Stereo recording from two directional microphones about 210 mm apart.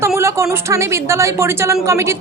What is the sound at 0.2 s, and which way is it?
A woman's voice, 15° right (ahead or behind).